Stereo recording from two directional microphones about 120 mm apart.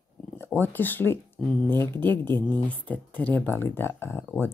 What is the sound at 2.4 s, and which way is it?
Speech, 40° right (ahead or behind).